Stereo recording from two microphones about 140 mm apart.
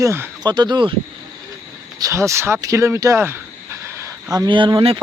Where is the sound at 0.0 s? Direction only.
20° right (ahead or behind).